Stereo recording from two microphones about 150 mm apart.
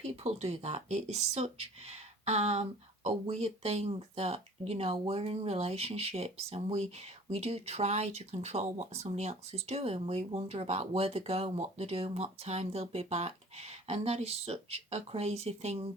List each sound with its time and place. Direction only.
0.0 s speech: 40° right (ahead or behind)